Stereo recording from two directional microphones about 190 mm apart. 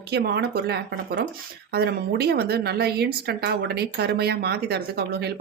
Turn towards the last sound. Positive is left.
turn(degrees=-60)  # may be behind; listen again after turning